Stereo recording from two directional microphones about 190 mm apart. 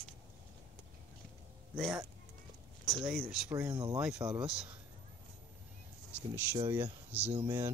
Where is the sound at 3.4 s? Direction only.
20° right (ahead or behind).